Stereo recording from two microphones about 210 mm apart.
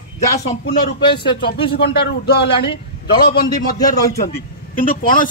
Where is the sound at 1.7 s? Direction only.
50° left (ahead or behind).